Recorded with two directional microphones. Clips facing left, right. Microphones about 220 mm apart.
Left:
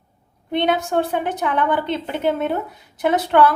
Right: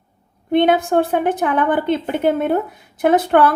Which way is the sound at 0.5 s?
50° right (ahead or behind).